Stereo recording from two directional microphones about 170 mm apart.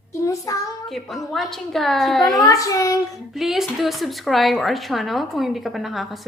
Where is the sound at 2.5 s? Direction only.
20° left (ahead or behind).